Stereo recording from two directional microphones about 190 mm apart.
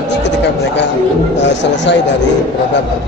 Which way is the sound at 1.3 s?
65° left (ahead or behind).